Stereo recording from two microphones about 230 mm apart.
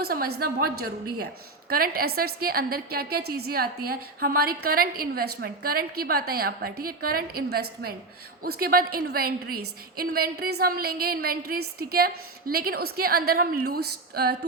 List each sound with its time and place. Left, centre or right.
0.0 s a woman's voice: right